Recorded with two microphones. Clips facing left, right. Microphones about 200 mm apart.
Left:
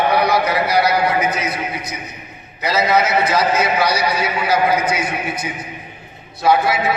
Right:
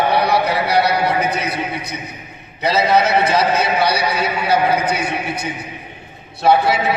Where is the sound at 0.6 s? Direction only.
65° right (ahead or behind).